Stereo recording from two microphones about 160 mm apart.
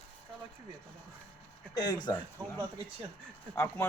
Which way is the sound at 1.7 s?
25° left (ahead or behind).